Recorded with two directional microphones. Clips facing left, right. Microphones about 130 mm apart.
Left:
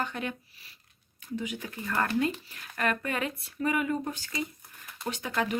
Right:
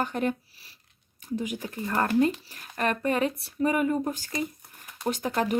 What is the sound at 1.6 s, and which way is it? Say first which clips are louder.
Speech: right 3 dB; 30° right (ahead or behind).